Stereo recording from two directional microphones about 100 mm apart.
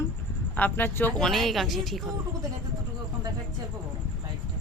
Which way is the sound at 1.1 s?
5° left (ahead or behind).